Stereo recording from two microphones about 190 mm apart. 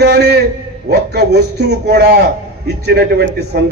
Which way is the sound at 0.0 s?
60° right (ahead or behind).